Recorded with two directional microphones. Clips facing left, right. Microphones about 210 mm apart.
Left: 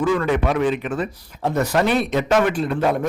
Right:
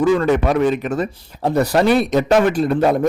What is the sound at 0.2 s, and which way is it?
Speech, 40° right (ahead or behind).